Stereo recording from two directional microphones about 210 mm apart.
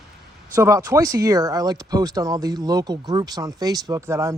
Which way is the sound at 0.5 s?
15° right (ahead or behind).